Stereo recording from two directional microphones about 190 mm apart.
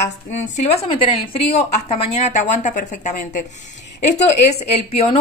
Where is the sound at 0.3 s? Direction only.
35° left (ahead or behind).